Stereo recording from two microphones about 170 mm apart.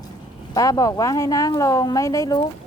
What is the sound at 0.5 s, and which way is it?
A woman's voice, 20° left (ahead or behind).